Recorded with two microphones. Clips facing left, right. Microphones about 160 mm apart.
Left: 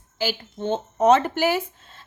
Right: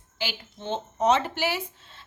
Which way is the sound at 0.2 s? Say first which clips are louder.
Left 8 dB; 45° left (ahead or behind).